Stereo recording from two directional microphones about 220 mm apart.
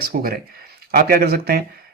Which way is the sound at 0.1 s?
40° right (ahead or behind).